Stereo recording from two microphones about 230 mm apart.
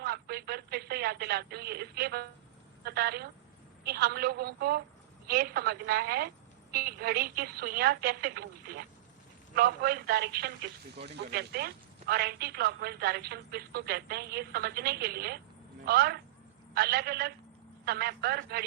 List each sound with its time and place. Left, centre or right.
0.0 s telephone: right
2.8 s a woman's voice: right